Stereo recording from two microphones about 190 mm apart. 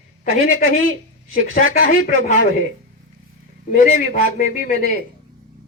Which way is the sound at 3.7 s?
40° left (ahead or behind).